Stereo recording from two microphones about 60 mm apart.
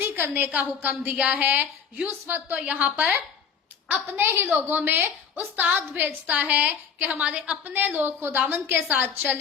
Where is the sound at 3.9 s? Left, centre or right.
Right.